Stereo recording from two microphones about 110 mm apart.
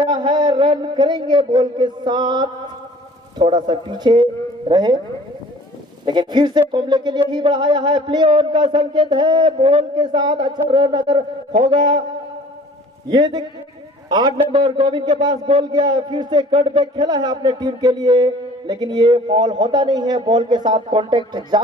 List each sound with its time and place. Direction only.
0.1 s a man's voice: 45° right (ahead or behind)
6.0 s speech: 45° right (ahead or behind)
9.9 s speech: 40° right (ahead or behind)
13.1 s a man's voice: 40° right (ahead or behind)